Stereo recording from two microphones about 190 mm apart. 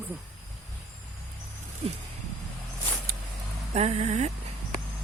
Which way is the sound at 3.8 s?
35° right (ahead or behind).